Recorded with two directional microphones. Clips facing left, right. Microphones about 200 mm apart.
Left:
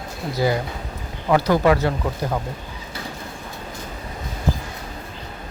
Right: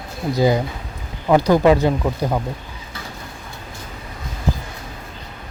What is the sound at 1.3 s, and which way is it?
Speech, 15° right (ahead or behind).